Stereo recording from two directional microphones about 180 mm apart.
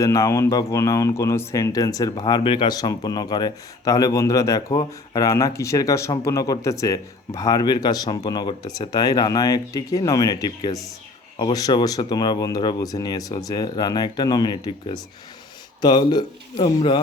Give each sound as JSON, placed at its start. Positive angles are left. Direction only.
{"t": 0.0, "sound": "speech", "side_deg": 15}